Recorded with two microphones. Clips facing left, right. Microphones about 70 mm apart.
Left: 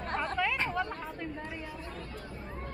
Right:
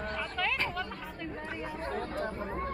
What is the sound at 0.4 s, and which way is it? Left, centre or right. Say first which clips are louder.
Chatter: right 1 dB; centre.